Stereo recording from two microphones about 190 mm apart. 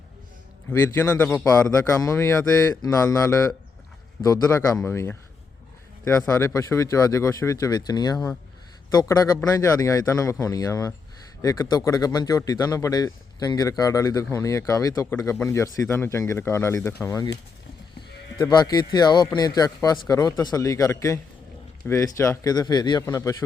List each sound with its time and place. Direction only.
0.7 s speech: 15° left (ahead or behind)
18.3 s speech: 20° left (ahead or behind)